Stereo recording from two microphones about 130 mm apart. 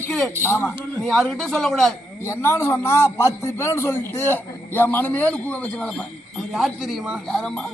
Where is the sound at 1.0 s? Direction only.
Centre (ahead or behind).